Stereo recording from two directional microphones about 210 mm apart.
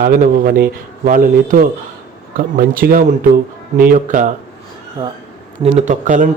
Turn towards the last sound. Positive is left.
turn(degrees=-35)  # may be behind; listen again after turning